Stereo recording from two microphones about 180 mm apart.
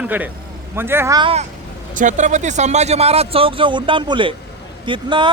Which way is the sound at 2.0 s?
45° right (ahead or behind).